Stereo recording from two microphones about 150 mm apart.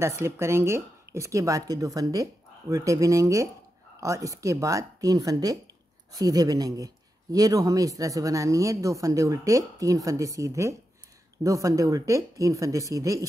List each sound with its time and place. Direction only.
0.0 s speech: 15° right (ahead or behind)